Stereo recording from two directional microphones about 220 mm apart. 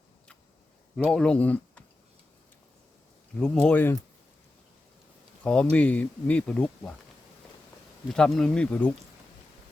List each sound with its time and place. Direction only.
0.9 s speech: 5° left (ahead or behind)
3.3 s speech: 5° left (ahead or behind)
5.4 s speech: 5° left (ahead or behind)
8.1 s speech: centre (ahead or behind)